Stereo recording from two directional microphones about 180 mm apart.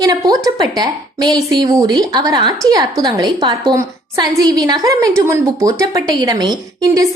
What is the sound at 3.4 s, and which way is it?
Speech, 30° right (ahead or behind).